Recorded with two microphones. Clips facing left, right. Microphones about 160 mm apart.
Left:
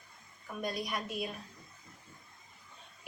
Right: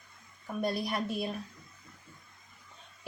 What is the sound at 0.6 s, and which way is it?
Speech, 30° right (ahead or behind).